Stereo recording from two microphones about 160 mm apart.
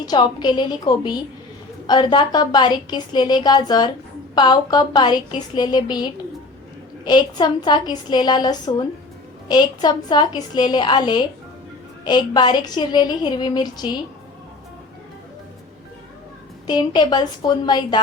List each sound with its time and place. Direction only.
0.0 s a woman's voice: 25° left (ahead or behind)
16.6 s a woman's voice: 25° left (ahead or behind)